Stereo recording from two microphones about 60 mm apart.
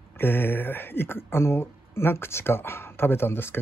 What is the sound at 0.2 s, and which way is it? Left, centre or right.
Speech, left.